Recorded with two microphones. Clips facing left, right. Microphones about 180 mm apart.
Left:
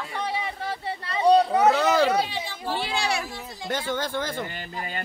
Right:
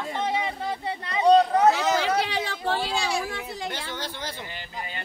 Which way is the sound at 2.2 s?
70° right (ahead or behind).